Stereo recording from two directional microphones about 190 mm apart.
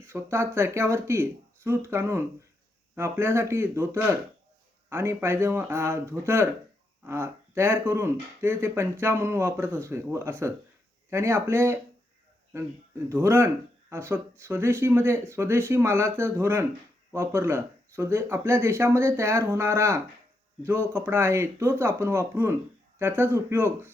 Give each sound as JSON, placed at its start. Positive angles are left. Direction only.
{"t": 0.0, "sound": "speech", "side_deg": -15}